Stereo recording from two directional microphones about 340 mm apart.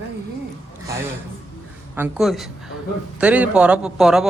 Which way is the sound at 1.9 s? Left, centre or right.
Centre.